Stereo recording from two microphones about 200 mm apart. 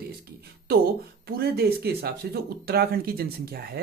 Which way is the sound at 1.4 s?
50° right (ahead or behind).